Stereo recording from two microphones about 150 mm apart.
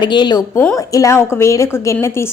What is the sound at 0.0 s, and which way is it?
A woman's voice, 30° left (ahead or behind).